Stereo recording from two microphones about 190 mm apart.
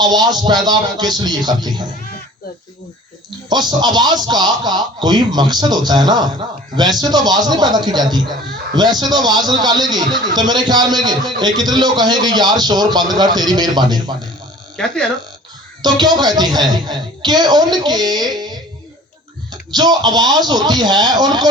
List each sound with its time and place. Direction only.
0.0 s speech: 20° right (ahead or behind)
3.2 s speech: 20° right (ahead or behind)
14.8 s speech: 5° left (ahead or behind)
15.8 s speech: 20° right (ahead or behind)
19.7 s speech: 20° right (ahead or behind)